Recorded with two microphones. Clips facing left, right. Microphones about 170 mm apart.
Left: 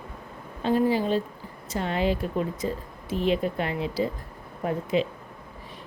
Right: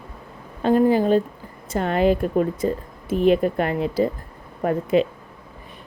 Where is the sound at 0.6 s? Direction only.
50° right (ahead or behind).